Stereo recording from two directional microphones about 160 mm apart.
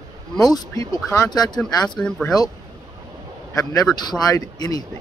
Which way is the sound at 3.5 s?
20° left (ahead or behind).